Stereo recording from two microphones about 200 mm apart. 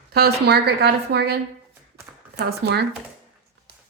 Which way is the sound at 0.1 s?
55° right (ahead or behind).